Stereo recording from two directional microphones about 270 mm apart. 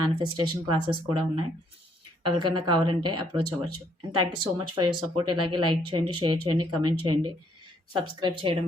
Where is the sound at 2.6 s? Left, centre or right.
Centre.